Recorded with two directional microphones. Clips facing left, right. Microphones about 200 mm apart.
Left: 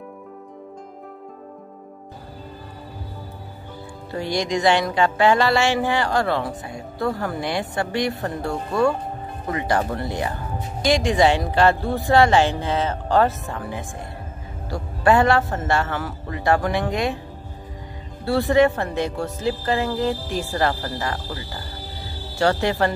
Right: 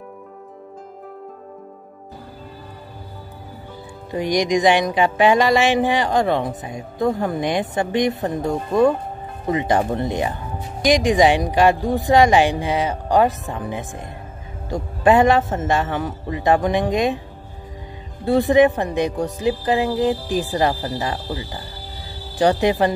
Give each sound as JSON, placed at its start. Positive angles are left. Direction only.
{"t": 4.1, "sound": "a man's voice", "side_deg": -15}
{"t": 18.2, "sound": "speech", "side_deg": -20}